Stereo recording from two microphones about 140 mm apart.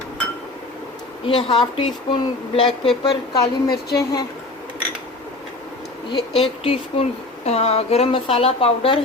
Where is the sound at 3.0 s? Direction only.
30° left (ahead or behind).